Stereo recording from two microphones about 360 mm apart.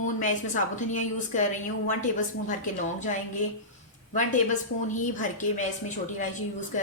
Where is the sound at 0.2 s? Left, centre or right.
Left.